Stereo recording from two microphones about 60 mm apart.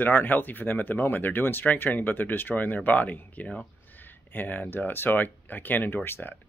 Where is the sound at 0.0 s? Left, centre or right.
Left.